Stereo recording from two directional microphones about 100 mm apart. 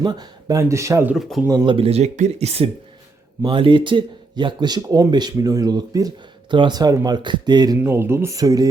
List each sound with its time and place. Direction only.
0.0 s speech: 45° right (ahead or behind)
1.1 s speech: 5° right (ahead or behind)
1.6 s speech: 65° right (ahead or behind); by 2.6 s 90° right
3.4 s speech: 55° right (ahead or behind)
7.8 s speech: 25° right (ahead or behind)